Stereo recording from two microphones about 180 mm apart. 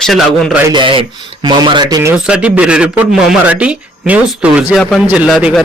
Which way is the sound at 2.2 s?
5° right (ahead or behind).